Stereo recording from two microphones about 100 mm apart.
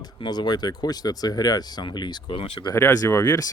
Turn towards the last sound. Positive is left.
turn(degrees=40)  # may be behind; listen again after turning